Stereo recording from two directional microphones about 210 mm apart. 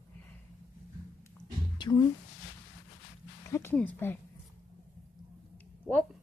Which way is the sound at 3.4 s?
10° left (ahead or behind).